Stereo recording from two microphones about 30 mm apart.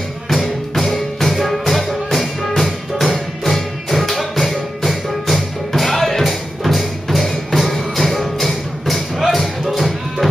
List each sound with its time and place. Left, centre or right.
0.3 s music: centre